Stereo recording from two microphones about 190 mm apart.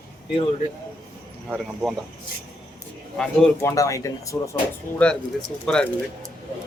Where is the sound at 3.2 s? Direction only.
5° left (ahead or behind).